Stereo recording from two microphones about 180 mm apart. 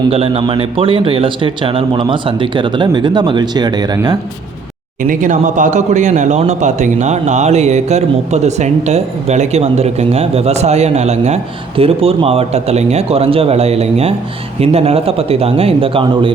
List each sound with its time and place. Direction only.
0.1 s a man's voice: 30° right (ahead or behind)
5.0 s speech: 45° right (ahead or behind)